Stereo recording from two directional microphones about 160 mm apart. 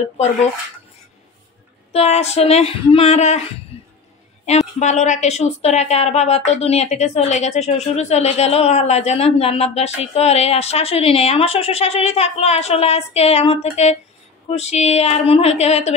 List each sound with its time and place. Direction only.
1.9 s a woman's voice: 40° left (ahead or behind)
3.7 s a sound: 35° left (ahead or behind)
4.5 s a woman's voice: 45° left (ahead or behind)